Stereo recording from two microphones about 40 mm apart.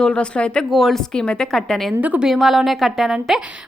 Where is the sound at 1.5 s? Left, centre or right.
Centre.